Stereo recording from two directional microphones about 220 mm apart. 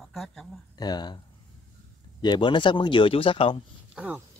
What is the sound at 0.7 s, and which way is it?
Speech, 20° left (ahead or behind).